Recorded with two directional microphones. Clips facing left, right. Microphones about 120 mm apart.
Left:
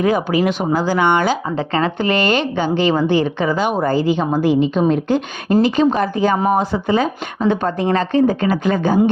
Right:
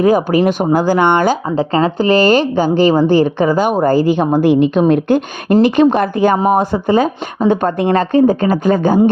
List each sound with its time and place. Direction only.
0.0 s speech: 40° right (ahead or behind)